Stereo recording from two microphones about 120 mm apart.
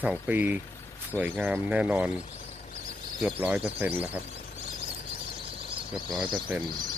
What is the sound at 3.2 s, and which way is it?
Speech, 15° right (ahead or behind).